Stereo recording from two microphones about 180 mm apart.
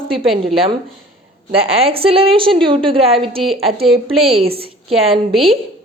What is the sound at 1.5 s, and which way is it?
A woman's voice, 35° right (ahead or behind).